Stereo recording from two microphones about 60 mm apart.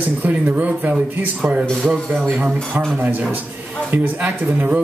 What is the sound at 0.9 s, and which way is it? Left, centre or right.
Speech, centre.